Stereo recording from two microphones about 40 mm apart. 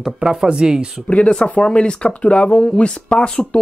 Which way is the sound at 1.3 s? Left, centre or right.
Left.